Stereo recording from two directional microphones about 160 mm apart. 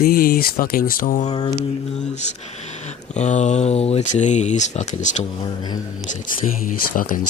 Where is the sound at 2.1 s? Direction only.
45° left (ahead or behind).